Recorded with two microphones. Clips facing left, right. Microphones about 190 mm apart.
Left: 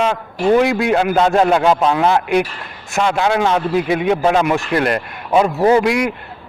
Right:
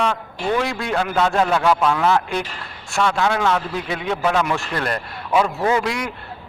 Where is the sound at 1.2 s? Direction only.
25° left (ahead or behind).